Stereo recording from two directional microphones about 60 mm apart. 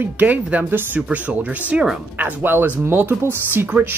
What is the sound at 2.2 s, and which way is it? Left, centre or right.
Speech, right.